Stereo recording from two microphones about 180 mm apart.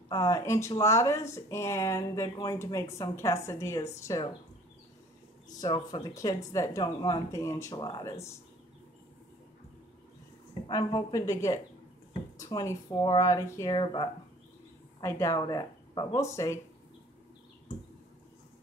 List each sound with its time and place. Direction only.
0.1 s speech: 20° left (ahead or behind)
4.1 s speech: 25° left (ahead or behind)
5.6 s speech: 20° left (ahead or behind)
10.7 s speech: 20° left (ahead or behind)